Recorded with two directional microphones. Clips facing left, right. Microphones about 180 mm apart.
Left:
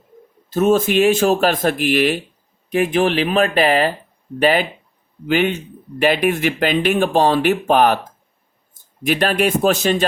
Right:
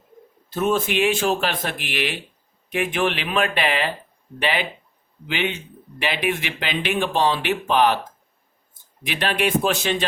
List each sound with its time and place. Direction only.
0.5 s speech: 40° left (ahead or behind)
9.0 s speech: 45° left (ahead or behind)